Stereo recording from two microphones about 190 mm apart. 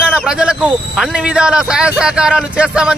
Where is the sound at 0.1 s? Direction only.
5° right (ahead or behind).